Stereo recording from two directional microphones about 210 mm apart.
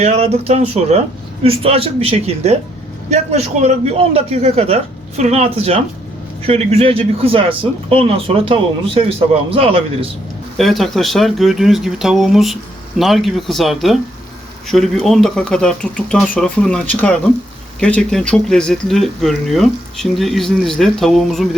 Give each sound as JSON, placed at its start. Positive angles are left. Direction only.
{"t": 0.0, "sound": "a man's voice", "side_deg": -30}
{"t": 10.6, "sound": "speech", "side_deg": 0}